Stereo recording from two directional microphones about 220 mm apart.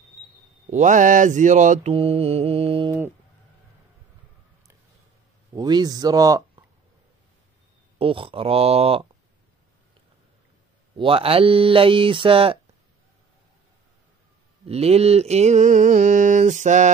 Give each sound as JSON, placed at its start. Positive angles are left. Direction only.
{"t": 0.7, "sound": "mantra", "side_deg": -35}
{"t": 5.5, "sound": "speech", "side_deg": -20}
{"t": 8.0, "sound": "speech", "side_deg": -25}
{"t": 11.0, "sound": "speech", "side_deg": -25}
{"t": 14.7, "sound": "mantra", "side_deg": -30}